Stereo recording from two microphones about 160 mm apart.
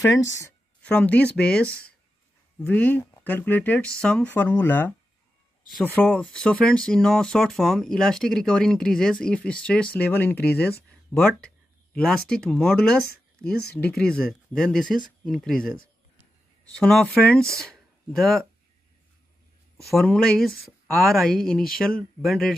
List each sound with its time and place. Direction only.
0.0 s a woman's voice: 20° left (ahead or behind)
0.8 s speech: 10° left (ahead or behind)
19.8 s speech: 5° left (ahead or behind)